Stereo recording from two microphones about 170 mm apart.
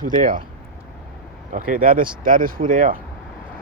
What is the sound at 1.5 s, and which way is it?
Speech, 55° right (ahead or behind).